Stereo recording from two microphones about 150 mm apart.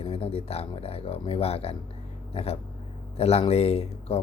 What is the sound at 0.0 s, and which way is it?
Speech, 40° left (ahead or behind).